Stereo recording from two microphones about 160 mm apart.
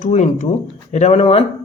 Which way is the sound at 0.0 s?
50° left (ahead or behind).